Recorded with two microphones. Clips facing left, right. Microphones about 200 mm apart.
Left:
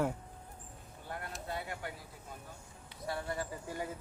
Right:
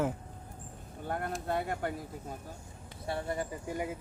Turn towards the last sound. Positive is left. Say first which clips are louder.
# right 4 dB
turn(degrees=-15)  # may be behind; listen again after turning